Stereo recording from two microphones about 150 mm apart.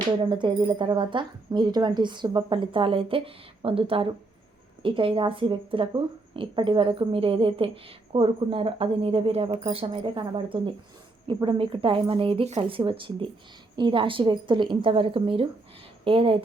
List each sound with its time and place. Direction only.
0.2 s a woman's voice: 30° right (ahead or behind)